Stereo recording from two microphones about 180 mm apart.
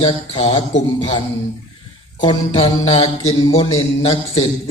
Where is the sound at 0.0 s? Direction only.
35° left (ahead or behind).